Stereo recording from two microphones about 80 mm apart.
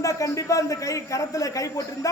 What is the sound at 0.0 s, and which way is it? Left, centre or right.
A man's voice, left.